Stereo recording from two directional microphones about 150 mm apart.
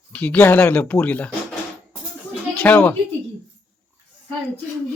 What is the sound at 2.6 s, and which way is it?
Speech, 10° left (ahead or behind).